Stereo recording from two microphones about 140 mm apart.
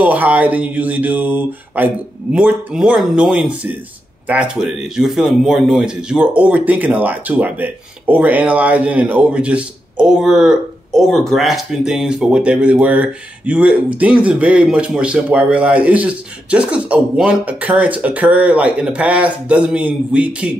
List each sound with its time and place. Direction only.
0.0 s a man's voice: 10° right (ahead or behind)